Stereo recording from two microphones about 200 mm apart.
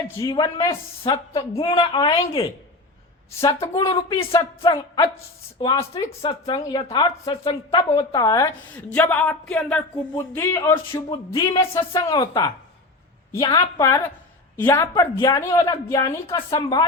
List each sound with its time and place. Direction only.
0.2 s speech: 20° left (ahead or behind)
3.8 s a woman's voice: 25° left (ahead or behind)